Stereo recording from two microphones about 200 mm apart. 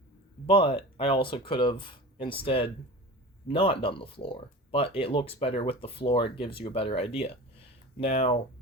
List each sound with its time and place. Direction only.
0.4 s speech: 25° left (ahead or behind)